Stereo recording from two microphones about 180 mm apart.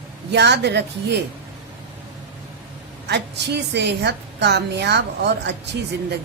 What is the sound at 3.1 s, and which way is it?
A woman's voice, 70° right (ahead or behind).